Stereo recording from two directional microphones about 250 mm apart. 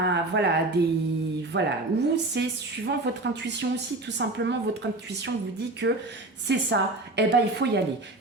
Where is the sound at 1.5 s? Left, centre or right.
Right.